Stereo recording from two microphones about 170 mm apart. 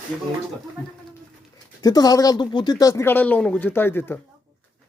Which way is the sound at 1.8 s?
20° left (ahead or behind).